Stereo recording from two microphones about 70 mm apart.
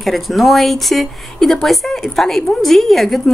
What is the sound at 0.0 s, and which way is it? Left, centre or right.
Speech, centre.